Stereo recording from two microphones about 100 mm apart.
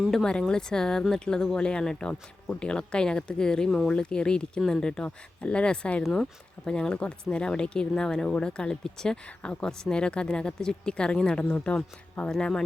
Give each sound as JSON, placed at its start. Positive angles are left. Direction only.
{"t": 0.1, "sound": "speech", "side_deg": 5}